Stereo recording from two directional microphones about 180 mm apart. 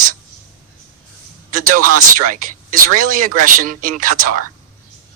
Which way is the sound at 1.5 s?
50° right (ahead or behind).